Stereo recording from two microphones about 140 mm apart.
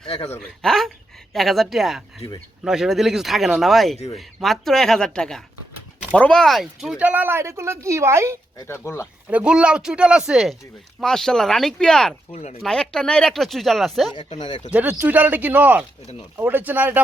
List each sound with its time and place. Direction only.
0.1 s speech: 45° left (ahead or behind)
0.6 s speech: 5° left (ahead or behind)
3.9 s speech: 50° left (ahead or behind)
4.4 s speech: centre (ahead or behind); by 8.4 s 20° right (ahead or behind)
8.5 s speech: 20° left (ahead or behind)
9.3 s speech: 5° right (ahead or behind)
12.3 s speech: 55° left (ahead or behind)
12.6 s speech: 5° left (ahead or behind)
14.3 s speech: 35° left (ahead or behind)
14.7 s speech: 10° right (ahead or behind)